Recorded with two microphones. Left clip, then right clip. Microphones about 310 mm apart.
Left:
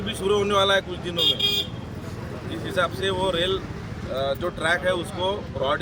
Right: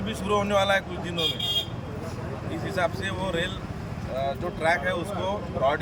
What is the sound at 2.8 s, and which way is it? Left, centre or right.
Speech, centre.